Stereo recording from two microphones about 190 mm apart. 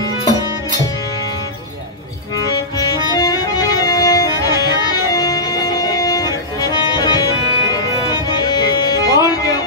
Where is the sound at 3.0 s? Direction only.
20° left (ahead or behind).